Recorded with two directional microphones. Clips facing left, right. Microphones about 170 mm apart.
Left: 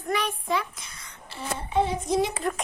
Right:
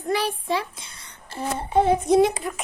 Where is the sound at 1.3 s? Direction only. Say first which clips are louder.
Right 5 dB; 50° right (ahead or behind).